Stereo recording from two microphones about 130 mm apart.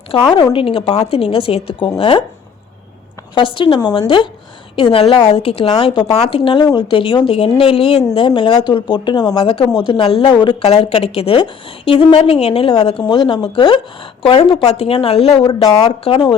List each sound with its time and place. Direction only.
0.1 s a woman's voice: 35° left (ahead or behind)
0.8 s speech: 30° left (ahead or behind)
1.1 s a woman's voice: 45° left (ahead or behind)
3.3 s a woman's voice: 40° left (ahead or behind)